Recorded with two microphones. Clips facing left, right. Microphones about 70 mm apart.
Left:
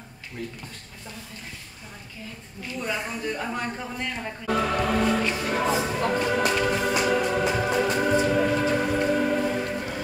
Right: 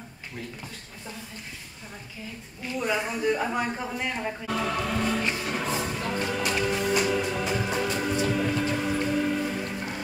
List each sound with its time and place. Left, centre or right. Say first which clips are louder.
2.8 s a man's voice: right 3 dB; centre
4.5 s music: left 6 dB; left